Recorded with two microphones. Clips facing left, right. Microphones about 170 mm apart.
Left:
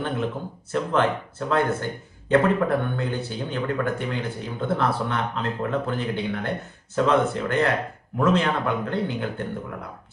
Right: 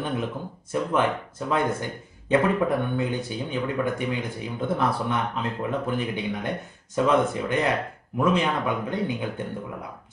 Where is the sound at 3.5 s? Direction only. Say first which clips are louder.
Left 1 dB; 10° right (ahead or behind).